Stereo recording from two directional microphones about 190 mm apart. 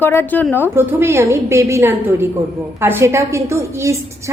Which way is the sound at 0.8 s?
10° right (ahead or behind).